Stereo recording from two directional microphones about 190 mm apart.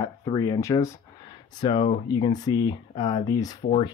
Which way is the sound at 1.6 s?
25° left (ahead or behind).